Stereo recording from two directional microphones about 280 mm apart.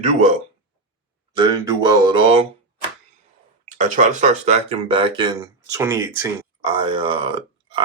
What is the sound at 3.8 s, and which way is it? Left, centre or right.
Speech, right.